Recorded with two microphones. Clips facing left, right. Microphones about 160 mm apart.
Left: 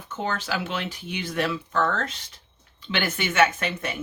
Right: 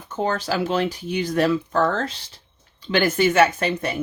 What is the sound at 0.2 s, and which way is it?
Speech, 35° right (ahead or behind).